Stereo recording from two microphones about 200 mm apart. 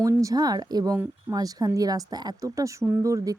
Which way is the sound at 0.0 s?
15° right (ahead or behind).